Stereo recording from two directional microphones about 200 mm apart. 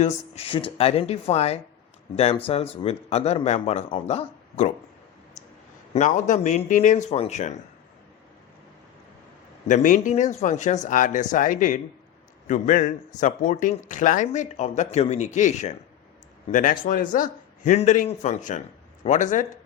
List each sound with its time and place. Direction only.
0.0 s speech: 30° left (ahead or behind)
5.9 s speech: 40° left (ahead or behind)
9.6 s speech: 40° left (ahead or behind)